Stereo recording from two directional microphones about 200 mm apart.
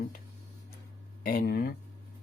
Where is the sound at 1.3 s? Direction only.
45° left (ahead or behind).